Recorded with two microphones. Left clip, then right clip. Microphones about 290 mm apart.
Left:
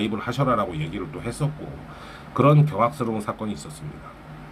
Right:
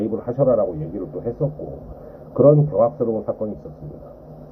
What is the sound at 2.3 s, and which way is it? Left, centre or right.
Speech, centre.